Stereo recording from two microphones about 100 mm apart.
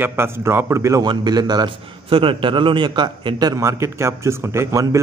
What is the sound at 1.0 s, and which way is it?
Speech, 45° right (ahead or behind).